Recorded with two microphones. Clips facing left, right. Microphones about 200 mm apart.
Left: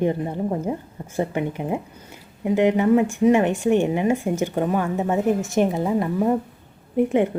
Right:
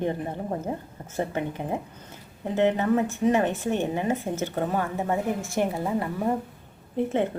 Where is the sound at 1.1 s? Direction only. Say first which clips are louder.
Left 4 dB; 15° left (ahead or behind).